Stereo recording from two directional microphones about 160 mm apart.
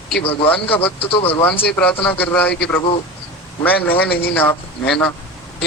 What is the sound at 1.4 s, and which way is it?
A man's voice, 10° left (ahead or behind).